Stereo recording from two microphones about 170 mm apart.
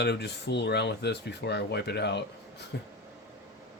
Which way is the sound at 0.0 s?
85° left.